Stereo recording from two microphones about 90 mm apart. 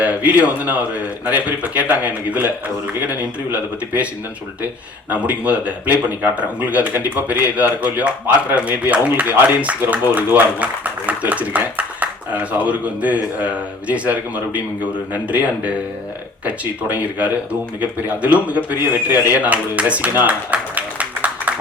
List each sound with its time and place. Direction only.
0.0 s speech: 15° right (ahead or behind)
3.5 s speech: 15° right (ahead or behind)